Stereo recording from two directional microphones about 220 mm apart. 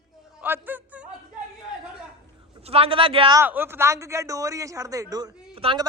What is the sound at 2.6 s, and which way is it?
Speech, 25° right (ahead or behind).